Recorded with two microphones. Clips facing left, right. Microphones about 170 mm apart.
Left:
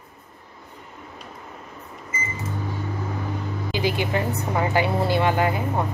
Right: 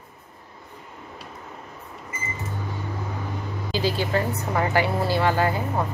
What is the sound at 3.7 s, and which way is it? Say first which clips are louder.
A woman's voice: even; 20° left (ahead or behind).